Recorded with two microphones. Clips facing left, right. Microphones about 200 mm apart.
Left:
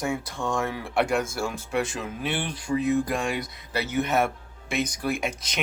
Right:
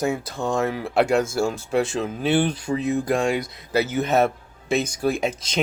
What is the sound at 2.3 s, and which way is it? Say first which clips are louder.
Speech: right 4 dB; 45° right (ahead or behind).